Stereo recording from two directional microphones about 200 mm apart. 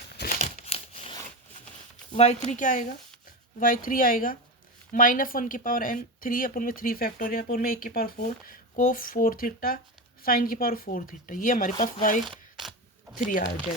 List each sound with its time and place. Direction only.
0.3 s crumpling: 35° left (ahead or behind)
2.1 s speech: 35° left (ahead or behind)
13.1 s speech: 45° left (ahead or behind)